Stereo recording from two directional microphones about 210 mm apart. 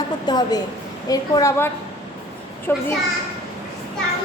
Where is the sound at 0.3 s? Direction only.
20° left (ahead or behind).